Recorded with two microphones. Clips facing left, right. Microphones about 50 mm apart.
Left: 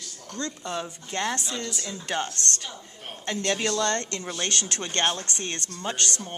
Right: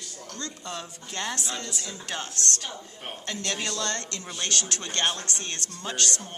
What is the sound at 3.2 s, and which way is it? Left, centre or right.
Speech, left.